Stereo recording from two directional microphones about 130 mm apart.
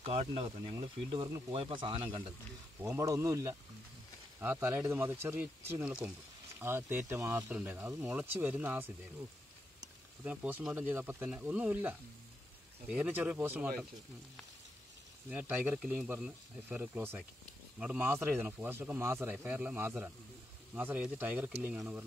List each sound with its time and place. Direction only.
0.0 s speech: 45° right (ahead or behind)
0.7 s speech: 35° right (ahead or behind)
2.8 s speech: 20° right (ahead or behind)
7.4 s speech: 10° right (ahead or behind)
10.2 s speech: 10° right (ahead or behind)
15.2 s speech: 15° right (ahead or behind)